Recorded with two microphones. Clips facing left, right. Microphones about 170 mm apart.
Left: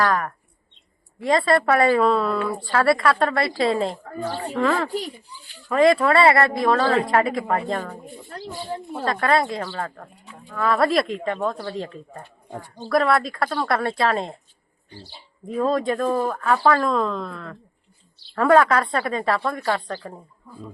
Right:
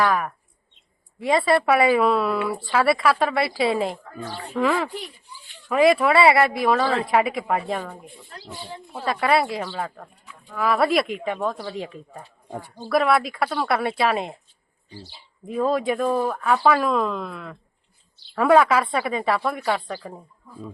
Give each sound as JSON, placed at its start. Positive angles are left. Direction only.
{"t": 0.0, "sound": "a woman's voice", "side_deg": -5}
{"t": 4.9, "sound": "a child's voice", "side_deg": 35}
{"t": 5.6, "sound": "speech", "side_deg": -5}
{"t": 8.0, "sound": "speech", "side_deg": 45}
{"t": 9.0, "sound": "a woman's voice", "side_deg": -10}
{"t": 15.4, "sound": "speech", "side_deg": -5}